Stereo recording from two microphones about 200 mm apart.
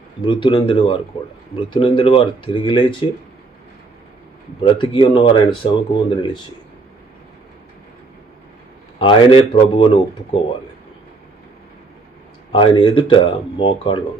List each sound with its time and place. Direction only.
0.2 s speech: 25° left (ahead or behind)
4.6 s speech: 25° left (ahead or behind)
8.9 s speech: 25° left (ahead or behind)
12.5 s speech: 25° left (ahead or behind)